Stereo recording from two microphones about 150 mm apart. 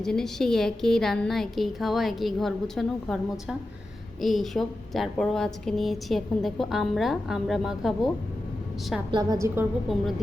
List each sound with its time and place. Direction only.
0.0 s a woman's voice: 5° left (ahead or behind)
9.1 s a woman's voice: 25° right (ahead or behind)